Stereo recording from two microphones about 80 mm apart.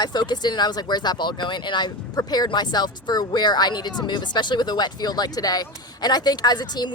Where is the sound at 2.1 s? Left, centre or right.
Left.